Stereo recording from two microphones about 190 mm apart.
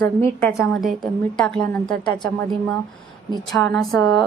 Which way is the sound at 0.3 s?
5° left (ahead or behind).